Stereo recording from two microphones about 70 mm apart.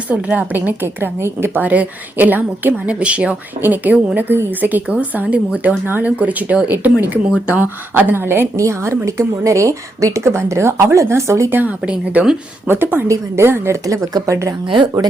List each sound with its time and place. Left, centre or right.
0.1 s a woman's voice: right
8.5 s speech: right
11.5 s a woman's voice: right
11.9 s a woman's voice: centre
12.6 s speech: right